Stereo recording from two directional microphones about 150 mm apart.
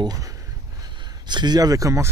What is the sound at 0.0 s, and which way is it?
Speech, 25° right (ahead or behind).